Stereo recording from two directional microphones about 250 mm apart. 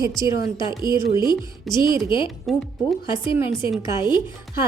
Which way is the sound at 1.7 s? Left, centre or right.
Centre.